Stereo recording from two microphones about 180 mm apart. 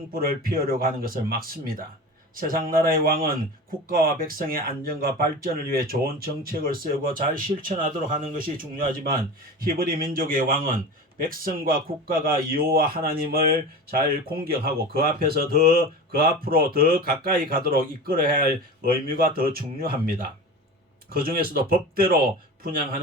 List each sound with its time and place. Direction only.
0.1 s a man's voice: 55° right (ahead or behind)